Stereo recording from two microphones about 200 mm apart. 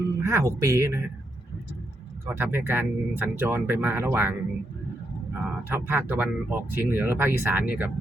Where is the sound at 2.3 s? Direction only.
10° right (ahead or behind).